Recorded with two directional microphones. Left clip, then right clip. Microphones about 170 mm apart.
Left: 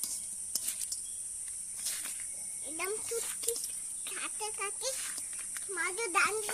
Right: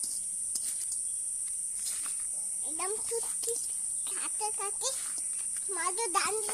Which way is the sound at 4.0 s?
20° right (ahead or behind).